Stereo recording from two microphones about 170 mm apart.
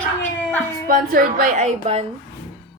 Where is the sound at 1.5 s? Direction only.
40° right (ahead or behind).